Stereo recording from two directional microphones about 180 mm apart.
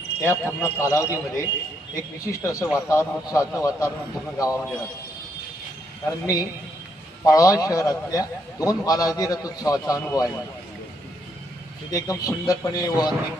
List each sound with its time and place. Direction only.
0.2 s a man's voice: 15° left (ahead or behind)
6.1 s a man's voice: 20° left (ahead or behind)
11.9 s a man's voice: 20° left (ahead or behind)